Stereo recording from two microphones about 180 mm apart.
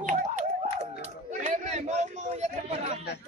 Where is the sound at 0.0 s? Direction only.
45° right (ahead or behind).